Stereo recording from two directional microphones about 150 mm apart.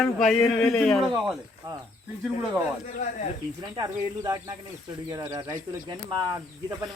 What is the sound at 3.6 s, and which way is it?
Speech, 25° right (ahead or behind).